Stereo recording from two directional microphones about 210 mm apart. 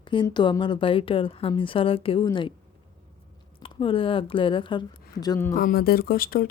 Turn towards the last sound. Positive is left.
turn(degrees=45)  # may be behind; listen again after turning